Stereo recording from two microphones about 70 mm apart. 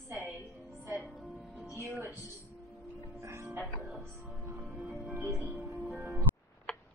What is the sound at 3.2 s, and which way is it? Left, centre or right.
Music, right.